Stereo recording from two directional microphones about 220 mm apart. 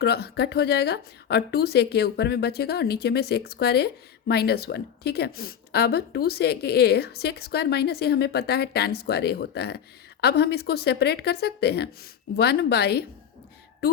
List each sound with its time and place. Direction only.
0.0 s speech: 45° left (ahead or behind)